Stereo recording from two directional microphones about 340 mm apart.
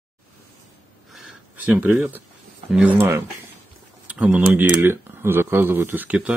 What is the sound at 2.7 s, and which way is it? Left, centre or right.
Speech, centre.